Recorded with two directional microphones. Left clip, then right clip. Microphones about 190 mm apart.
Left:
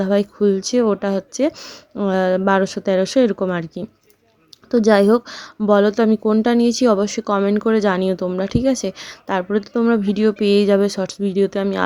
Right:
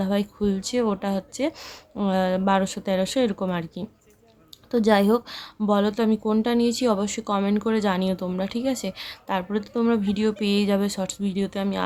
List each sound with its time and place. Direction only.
0.0 s speech: 25° left (ahead or behind)